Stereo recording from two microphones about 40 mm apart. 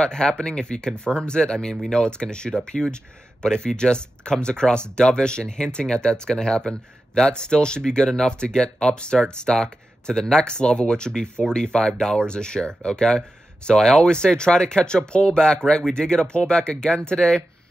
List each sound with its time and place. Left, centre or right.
0.0 s speech: left